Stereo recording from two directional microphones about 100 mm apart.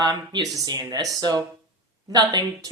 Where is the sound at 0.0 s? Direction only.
45° right (ahead or behind).